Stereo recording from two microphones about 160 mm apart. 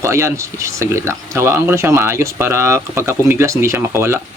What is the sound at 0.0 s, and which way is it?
Speech, 15° right (ahead or behind).